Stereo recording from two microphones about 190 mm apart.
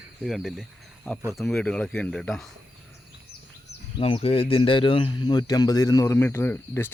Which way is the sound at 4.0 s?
30° left (ahead or behind).